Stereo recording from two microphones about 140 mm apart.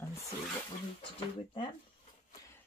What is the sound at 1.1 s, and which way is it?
Speech, 40° left (ahead or behind).